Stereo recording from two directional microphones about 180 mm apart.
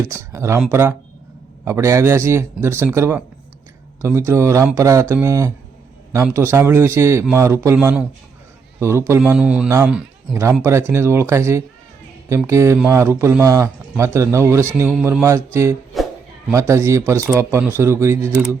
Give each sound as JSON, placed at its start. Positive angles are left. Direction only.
{"t": 0.0, "sound": "a man's voice", "side_deg": -15}
{"t": 15.9, "sound": "music", "side_deg": 0}
{"t": 16.5, "sound": "a man's voice", "side_deg": -15}